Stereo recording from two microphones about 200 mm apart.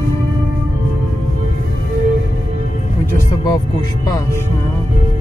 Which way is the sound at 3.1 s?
20° left (ahead or behind).